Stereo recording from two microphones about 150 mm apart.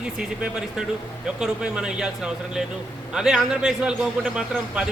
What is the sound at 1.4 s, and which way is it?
A man's voice, 5° right (ahead or behind).